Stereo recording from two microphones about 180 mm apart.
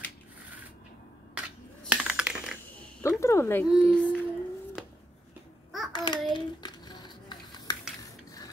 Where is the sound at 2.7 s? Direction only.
10° left (ahead or behind).